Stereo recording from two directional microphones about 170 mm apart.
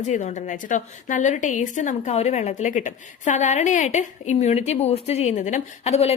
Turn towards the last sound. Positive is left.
turn(degrees=40)  # may be behind; listen again after turning